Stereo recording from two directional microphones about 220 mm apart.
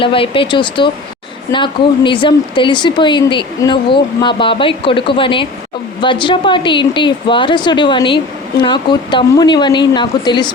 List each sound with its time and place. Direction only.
0.0 s a woman's voice: 25° left (ahead or behind)